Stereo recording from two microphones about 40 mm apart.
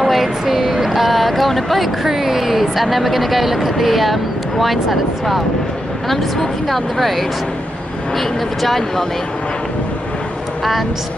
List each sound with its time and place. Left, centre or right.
0.0 s a sound: centre
2.0 s speech: centre
10.6 s vehicle: centre